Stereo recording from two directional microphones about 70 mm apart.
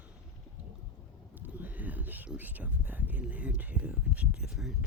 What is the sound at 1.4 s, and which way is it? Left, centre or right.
Speech, right.